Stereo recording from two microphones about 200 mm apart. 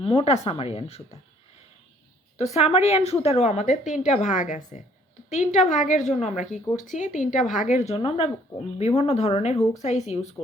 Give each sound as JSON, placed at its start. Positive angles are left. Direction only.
{"t": 0.0, "sound": "speech", "side_deg": 30}
{"t": 2.4, "sound": "a woman's voice", "side_deg": 30}